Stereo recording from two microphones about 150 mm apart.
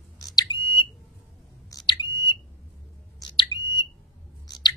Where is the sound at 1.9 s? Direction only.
30° left (ahead or behind).